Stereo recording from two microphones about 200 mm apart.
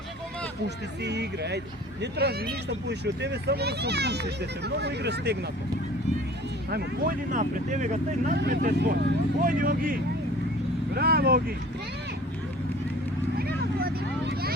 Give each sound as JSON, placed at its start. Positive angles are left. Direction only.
{"t": 1.0, "sound": "speech", "side_deg": -55}
{"t": 6.7, "sound": "speech", "side_deg": -50}
{"t": 8.4, "sound": "speech", "side_deg": -55}
{"t": 13.7, "sound": "vehicle", "side_deg": -50}